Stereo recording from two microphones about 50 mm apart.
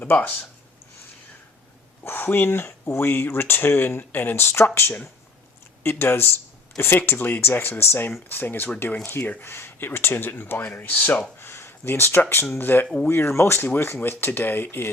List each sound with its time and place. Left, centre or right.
0.0 s speech: left
2.0 s speech: left
9.5 s speech: left
11.3 s a sound: left
12.5 s speech: left
13.1 s speech: left